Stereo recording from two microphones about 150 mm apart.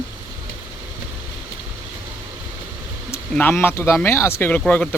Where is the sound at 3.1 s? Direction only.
15° left (ahead or behind).